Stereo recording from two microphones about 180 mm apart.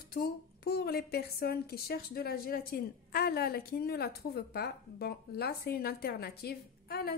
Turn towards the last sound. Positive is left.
turn(degrees=60)  # may be behind; listen again after turning